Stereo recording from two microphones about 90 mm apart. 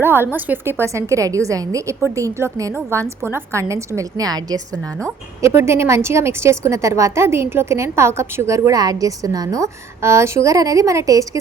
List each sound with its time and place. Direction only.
0.0 s a woman's voice: 25° right (ahead or behind); by 4.6 s 45° right (ahead or behind)
5.4 s a woman's voice: 30° right (ahead or behind)